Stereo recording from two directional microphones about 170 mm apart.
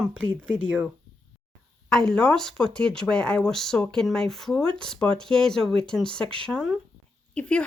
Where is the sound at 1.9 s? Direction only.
5° left (ahead or behind).